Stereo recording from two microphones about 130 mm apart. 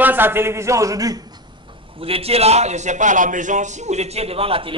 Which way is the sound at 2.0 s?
50° right (ahead or behind).